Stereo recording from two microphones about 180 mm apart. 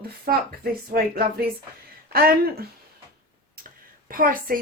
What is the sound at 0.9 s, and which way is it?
A woman's voice, 55° right (ahead or behind).